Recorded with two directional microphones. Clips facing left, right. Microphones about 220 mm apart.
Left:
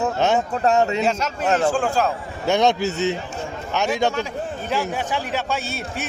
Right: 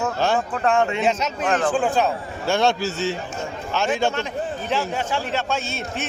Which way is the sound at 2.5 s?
20° left (ahead or behind).